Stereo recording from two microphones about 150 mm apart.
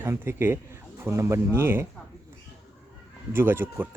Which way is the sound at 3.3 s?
15° right (ahead or behind).